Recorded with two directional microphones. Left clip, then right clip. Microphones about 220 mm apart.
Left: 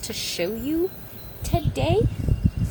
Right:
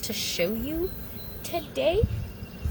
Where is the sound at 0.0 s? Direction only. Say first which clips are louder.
Left 1 dB; 25° left (ahead or behind).